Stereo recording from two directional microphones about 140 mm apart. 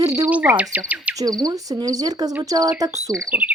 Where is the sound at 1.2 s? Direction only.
25° right (ahead or behind).